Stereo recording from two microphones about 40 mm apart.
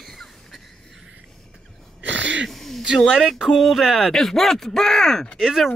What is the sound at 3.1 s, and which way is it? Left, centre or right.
Speech, centre.